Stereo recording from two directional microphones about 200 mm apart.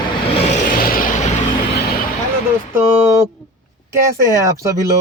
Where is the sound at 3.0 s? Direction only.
15° right (ahead or behind).